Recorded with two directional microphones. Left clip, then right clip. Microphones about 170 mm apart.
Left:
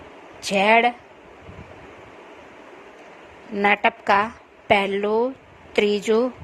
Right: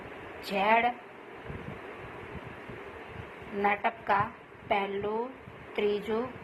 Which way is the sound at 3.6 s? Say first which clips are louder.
Left 10 dB; 90° left.